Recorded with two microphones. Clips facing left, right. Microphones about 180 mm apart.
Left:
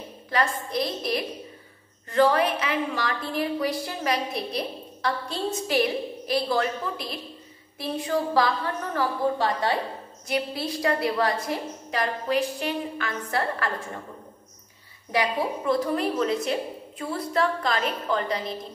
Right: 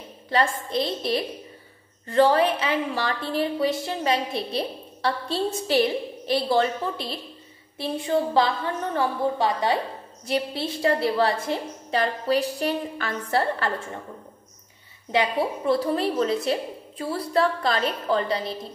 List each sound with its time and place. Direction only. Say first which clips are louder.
0.7 s a woman's voice: right 2 dB; 25° right (ahead or behind)
15.0 s a woman's voice: right 2 dB; 25° right (ahead or behind)